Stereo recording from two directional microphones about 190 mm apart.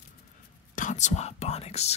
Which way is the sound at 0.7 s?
40° left (ahead or behind).